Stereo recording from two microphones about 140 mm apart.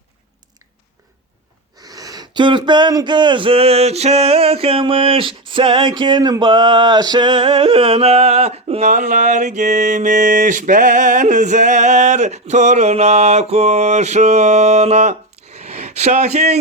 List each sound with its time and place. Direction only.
1.8 s speech: 25° right (ahead or behind); by 8.9 s 45° right (ahead or behind)
8.9 s mantra: 60° right (ahead or behind)